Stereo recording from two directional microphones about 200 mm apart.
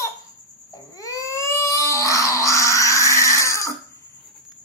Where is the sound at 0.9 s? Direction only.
15° left (ahead or behind).